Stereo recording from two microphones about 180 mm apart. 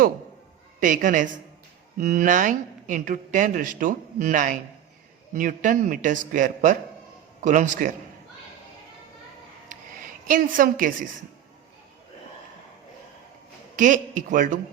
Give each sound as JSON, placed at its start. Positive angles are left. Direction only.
{"t": 0.8, "sound": "speech", "side_deg": -50}
{"t": 9.6, "sound": "a sound", "side_deg": -45}
{"t": 13.7, "sound": "speech", "side_deg": -45}